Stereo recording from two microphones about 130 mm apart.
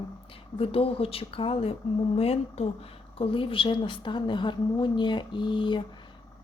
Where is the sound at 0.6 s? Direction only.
45° left (ahead or behind).